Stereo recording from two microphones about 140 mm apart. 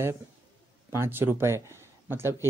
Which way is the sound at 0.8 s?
20° right (ahead or behind).